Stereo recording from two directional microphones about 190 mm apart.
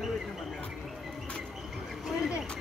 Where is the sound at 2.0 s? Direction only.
Centre (ahead or behind).